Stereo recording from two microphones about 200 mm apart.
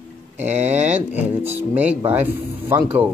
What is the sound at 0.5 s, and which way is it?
Speech, 35° right (ahead or behind).